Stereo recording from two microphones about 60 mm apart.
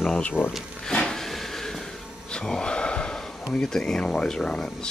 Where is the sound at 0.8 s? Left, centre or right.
Centre.